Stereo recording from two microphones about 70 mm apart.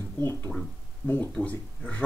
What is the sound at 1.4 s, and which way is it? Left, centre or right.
Speech, centre.